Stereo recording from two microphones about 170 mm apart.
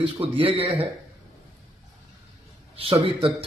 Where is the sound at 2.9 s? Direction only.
25° right (ahead or behind).